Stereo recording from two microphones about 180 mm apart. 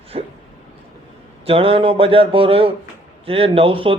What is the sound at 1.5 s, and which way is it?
A man's voice, 30° right (ahead or behind).